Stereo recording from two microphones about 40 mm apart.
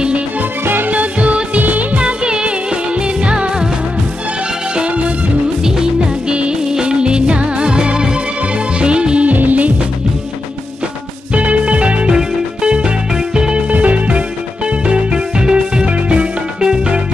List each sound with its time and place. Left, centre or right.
0.8 s music: right
1.6 s music of bollywood: right
2.2 s music: right
4.7 s music: right
5.6 s music of bollywood: centre
6.7 s music: right
9.2 s music: right
11.3 s music: right
12.1 s music: centre
13.7 s music: right